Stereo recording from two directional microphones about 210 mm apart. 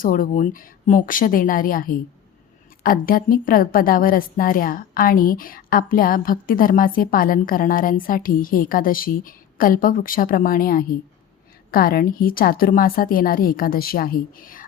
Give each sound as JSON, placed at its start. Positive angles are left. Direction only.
{"t": 0.0, "sound": "a woman's voice", "side_deg": 40}